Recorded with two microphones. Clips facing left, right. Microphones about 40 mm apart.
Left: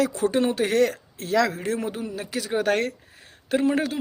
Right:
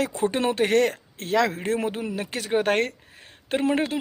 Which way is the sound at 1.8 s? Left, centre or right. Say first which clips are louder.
Right 2 dB; right.